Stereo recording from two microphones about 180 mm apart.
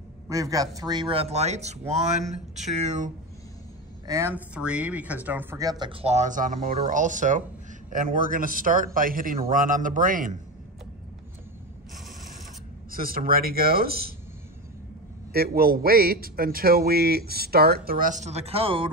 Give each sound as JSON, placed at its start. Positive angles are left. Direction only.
{"t": 0.3, "sound": "speech", "side_deg": -20}
{"t": 4.1, "sound": "a man's voice", "side_deg": -15}
{"t": 12.9, "sound": "a man's voice", "side_deg": -55}
{"t": 15.3, "sound": "a man's voice", "side_deg": -55}